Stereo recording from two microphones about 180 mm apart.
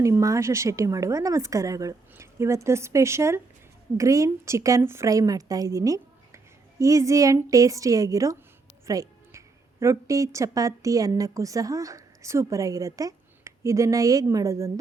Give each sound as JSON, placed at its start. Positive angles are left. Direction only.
{"t": 0.0, "sound": "a woman's voice", "side_deg": -15}
{"t": 8.9, "sound": "music", "side_deg": -20}
{"t": 9.8, "sound": "a woman's voice", "side_deg": -15}